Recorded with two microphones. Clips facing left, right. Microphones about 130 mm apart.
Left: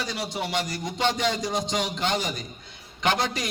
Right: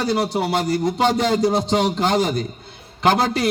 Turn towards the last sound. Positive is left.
turn(degrees=-40)  # may be behind; listen again after turning